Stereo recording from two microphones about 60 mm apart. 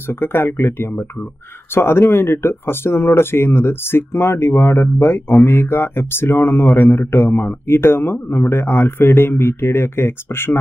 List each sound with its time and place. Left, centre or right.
0.1 s speech: left
6.6 s a man's voice: centre
7.0 s speech: left